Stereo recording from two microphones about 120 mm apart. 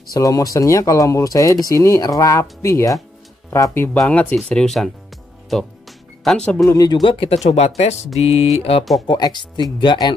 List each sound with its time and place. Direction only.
0.1 s speech: 30° left (ahead or behind); by 4.9 s centre (ahead or behind)
5.5 s music: centre (ahead or behind)
6.6 s speech: 25° left (ahead or behind)
6.9 s speech: 40° left (ahead or behind)
9.0 s speech: 40° left (ahead or behind)